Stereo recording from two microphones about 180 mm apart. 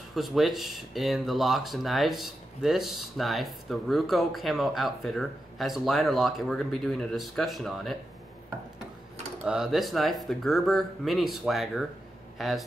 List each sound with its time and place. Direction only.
0.1 s speech: centre (ahead or behind)
9.4 s speech: 5° right (ahead or behind)